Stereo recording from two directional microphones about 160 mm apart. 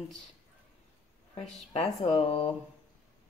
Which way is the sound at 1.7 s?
45° left (ahead or behind).